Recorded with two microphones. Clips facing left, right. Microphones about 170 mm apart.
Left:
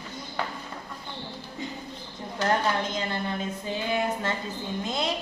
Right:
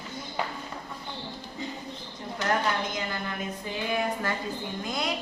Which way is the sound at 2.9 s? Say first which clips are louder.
Left 3 dB; 30° left (ahead or behind).